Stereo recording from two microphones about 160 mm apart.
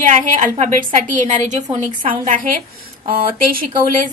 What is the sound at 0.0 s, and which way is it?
A woman's voice, 50° right (ahead or behind).